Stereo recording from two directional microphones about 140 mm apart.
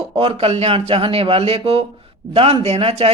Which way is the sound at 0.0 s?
40° right (ahead or behind).